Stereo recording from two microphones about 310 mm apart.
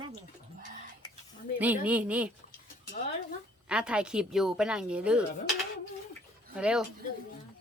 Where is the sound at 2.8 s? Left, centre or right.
Left.